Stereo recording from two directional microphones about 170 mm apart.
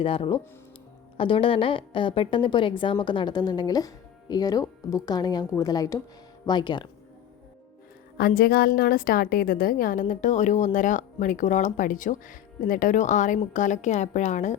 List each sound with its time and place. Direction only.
0.0 s a woman's voice: 30° left (ahead or behind)
8.4 s a woman's voice: 60° left (ahead or behind); by 14.6 s 45° left (ahead or behind)